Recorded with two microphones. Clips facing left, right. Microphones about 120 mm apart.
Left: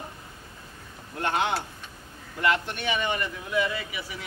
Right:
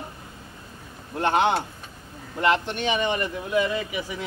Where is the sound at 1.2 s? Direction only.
25° right (ahead or behind).